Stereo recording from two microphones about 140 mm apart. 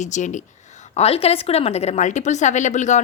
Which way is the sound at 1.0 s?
45° left (ahead or behind).